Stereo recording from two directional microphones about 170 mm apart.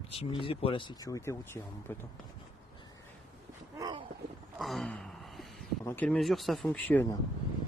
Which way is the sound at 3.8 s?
25° right (ahead or behind).